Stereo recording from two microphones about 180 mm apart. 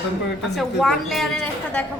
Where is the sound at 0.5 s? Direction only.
Centre (ahead or behind).